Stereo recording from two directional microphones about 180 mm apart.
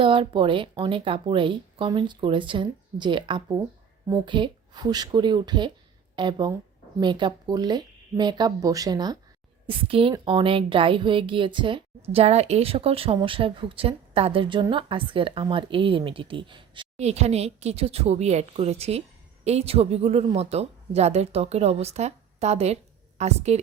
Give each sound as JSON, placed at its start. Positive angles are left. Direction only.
{"t": 0.0, "sound": "a woman's voice", "side_deg": -30}